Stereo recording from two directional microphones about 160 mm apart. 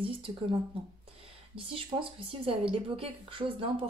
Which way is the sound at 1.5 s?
35° right (ahead or behind).